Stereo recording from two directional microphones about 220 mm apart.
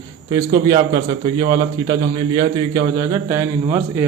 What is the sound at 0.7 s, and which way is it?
A man's voice, 20° right (ahead or behind).